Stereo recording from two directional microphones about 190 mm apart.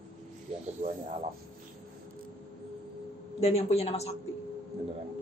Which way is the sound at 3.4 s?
35° left (ahead or behind).